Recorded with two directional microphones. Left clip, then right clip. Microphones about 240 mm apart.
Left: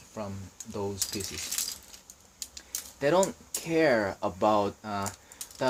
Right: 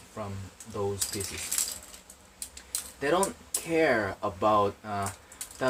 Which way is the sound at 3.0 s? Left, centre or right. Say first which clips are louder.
Left 2 dB; left.